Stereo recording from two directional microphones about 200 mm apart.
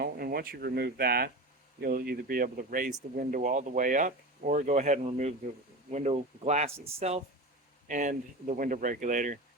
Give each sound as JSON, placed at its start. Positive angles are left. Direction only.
{"t": 0.0, "sound": "speech", "side_deg": -50}